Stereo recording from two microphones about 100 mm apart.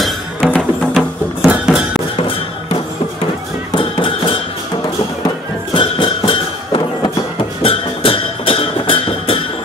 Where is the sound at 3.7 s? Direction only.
60° left (ahead or behind).